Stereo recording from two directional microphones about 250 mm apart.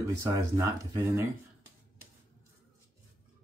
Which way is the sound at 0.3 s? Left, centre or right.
Centre.